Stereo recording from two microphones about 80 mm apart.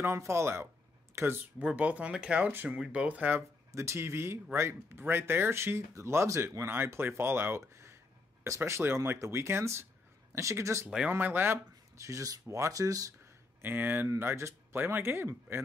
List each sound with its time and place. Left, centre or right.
0.0 s speech: right
1.6 s speech: centre
3.7 s speech: right
7.6 s a sound: right
8.5 s speech: right
11.1 s speech: right
12.0 s speech: right
13.6 s speech: right